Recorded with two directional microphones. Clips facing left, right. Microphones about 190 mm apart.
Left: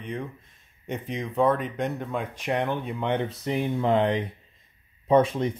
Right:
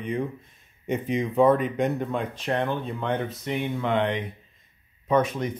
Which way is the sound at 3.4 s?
35° left (ahead or behind).